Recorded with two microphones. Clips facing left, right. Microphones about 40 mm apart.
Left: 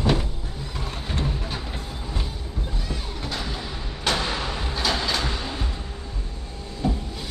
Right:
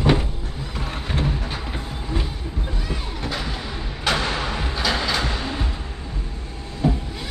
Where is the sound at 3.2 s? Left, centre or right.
Centre.